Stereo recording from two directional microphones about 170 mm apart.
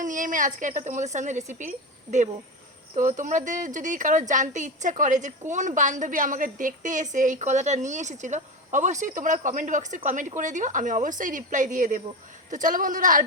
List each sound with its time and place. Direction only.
0.0 s speech: 50° right (ahead or behind)